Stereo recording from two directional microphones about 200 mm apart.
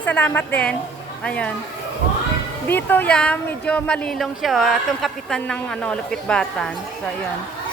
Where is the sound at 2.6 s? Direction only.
10° left (ahead or behind).